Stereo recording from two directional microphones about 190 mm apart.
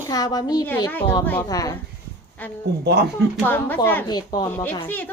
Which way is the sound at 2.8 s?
60° right (ahead or behind).